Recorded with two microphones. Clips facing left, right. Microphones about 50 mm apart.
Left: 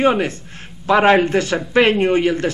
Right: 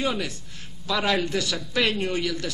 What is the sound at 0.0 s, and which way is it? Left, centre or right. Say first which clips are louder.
Speech: left 11 dB; left.